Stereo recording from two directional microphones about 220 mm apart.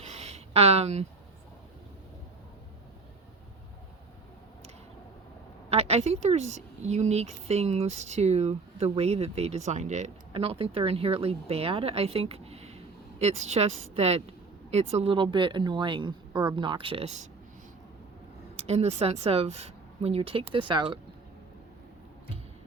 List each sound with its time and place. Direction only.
0.0 s a sound: 30° right (ahead or behind)
5.6 s speech: 30° right (ahead or behind)
18.5 s speech: 30° right (ahead or behind)